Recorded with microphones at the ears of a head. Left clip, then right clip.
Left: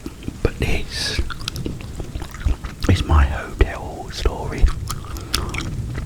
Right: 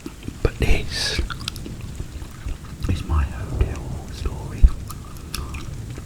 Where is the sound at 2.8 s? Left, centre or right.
Left.